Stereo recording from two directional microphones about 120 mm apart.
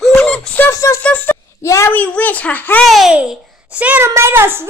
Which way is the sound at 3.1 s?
10° right (ahead or behind).